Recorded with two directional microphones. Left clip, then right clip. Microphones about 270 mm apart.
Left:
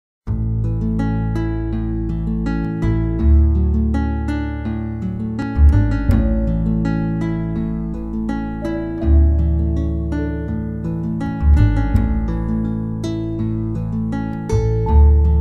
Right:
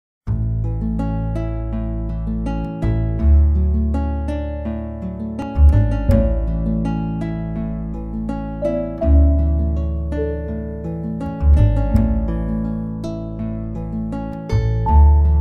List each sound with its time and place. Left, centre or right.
5.8 s music: centre